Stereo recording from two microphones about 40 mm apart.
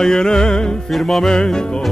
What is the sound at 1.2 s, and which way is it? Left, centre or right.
Music, centre.